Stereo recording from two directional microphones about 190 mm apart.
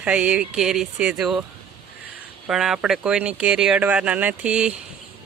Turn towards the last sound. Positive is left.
turn(degrees=-5)  # may be behind; listen again after turning